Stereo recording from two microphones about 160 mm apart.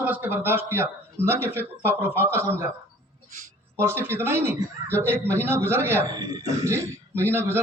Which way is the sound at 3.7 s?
15° right (ahead or behind).